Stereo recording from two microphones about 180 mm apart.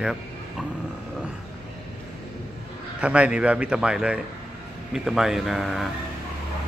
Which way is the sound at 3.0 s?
5° right (ahead or behind).